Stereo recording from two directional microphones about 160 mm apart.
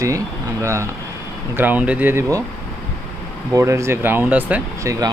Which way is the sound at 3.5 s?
20° right (ahead or behind).